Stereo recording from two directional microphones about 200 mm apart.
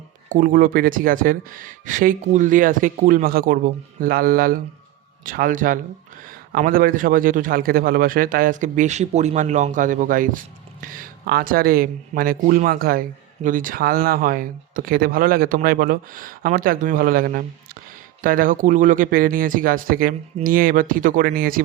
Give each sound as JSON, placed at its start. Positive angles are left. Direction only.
{"t": 0.3, "sound": "a man's voice", "side_deg": -45}